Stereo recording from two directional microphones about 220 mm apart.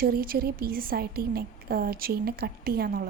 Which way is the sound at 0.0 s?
40° right (ahead or behind).